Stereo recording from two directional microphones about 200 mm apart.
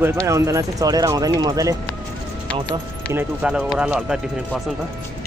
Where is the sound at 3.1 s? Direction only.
5° right (ahead or behind).